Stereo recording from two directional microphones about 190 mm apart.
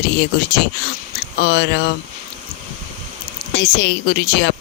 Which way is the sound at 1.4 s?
65° left (ahead or behind).